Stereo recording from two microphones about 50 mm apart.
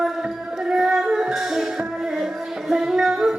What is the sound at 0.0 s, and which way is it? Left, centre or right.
Music, centre.